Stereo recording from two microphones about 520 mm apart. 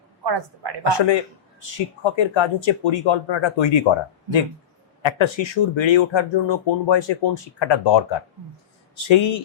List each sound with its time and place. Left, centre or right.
0.3 s a woman's voice: right
0.9 s a man's voice: left
5.0 s speech: left